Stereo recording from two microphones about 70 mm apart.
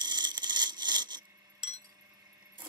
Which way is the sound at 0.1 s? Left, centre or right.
Right.